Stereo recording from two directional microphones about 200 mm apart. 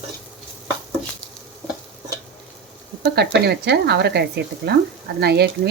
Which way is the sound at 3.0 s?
55° right (ahead or behind).